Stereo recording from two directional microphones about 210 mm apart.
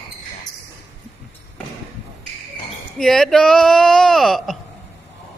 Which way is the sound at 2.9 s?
Centre (ahead or behind).